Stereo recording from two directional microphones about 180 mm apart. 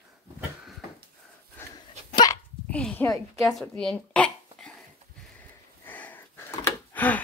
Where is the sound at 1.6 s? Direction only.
10° left (ahead or behind).